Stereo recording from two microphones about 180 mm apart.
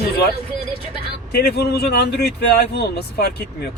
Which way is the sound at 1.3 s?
65° left (ahead or behind).